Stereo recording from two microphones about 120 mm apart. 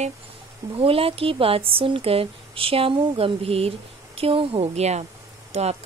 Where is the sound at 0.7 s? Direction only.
50° right (ahead or behind).